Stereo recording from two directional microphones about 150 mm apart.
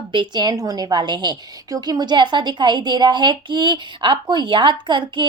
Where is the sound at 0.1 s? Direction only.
30° right (ahead or behind).